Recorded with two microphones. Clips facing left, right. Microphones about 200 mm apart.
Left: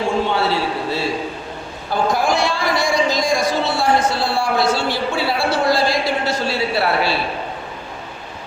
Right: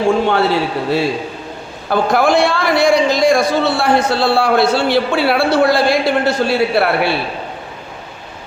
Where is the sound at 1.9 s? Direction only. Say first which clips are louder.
Right 5 dB; 60° right (ahead or behind).